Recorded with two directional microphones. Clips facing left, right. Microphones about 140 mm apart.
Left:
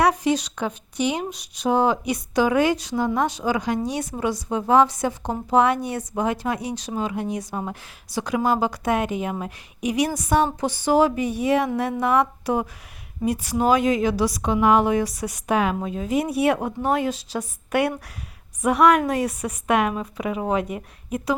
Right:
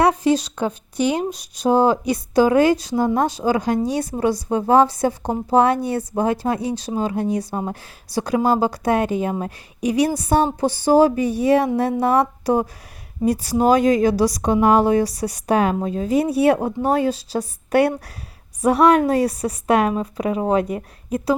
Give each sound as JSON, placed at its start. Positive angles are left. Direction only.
{"t": 0.0, "sound": "a woman's voice", "side_deg": -30}